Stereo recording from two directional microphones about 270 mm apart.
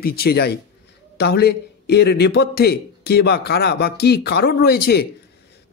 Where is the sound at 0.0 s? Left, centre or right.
Left.